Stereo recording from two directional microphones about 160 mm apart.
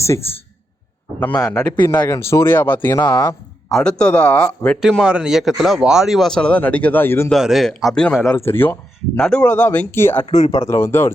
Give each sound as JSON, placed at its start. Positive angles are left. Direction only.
{"t": 1.2, "sound": "speech", "side_deg": 10}
{"t": 3.0, "sound": "speech", "side_deg": 25}
{"t": 3.7, "sound": "speech", "side_deg": 5}
{"t": 7.3, "sound": "speech", "side_deg": 0}